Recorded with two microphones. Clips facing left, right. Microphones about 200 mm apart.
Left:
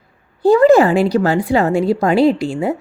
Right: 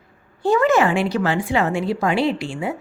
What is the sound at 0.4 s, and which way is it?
A woman's voice, 35° left (ahead or behind).